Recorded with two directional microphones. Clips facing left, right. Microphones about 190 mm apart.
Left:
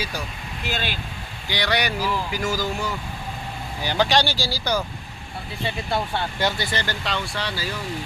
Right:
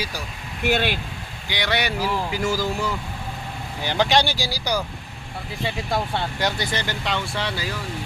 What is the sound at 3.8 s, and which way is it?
Speech, 20° right (ahead or behind).